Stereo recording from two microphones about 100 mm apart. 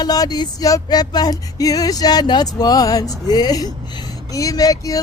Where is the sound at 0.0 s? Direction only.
40° left (ahead or behind).